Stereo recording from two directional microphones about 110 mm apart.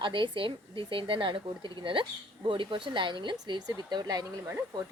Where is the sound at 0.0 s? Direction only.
50° right (ahead or behind).